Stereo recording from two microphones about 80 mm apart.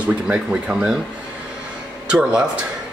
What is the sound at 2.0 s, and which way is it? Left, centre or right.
Speech, centre.